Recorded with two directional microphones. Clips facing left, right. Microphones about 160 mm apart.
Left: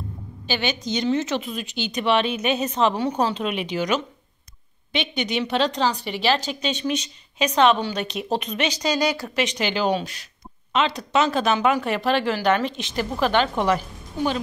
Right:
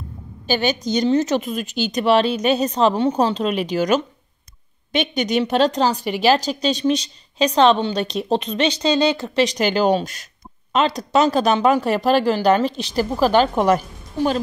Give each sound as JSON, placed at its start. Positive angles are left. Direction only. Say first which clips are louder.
{"t": 0.5, "sound": "a woman's voice", "louder": "right 5 dB", "side_deg": -40}